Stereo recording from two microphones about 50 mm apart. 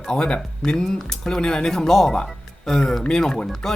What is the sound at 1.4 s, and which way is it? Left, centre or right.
Speech, centre.